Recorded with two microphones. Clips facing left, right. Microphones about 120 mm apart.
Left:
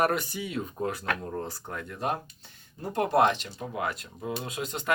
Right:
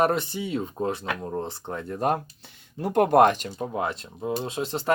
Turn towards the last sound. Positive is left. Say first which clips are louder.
# right 5 dB
turn(degrees=-30)  # may be behind; listen again after turning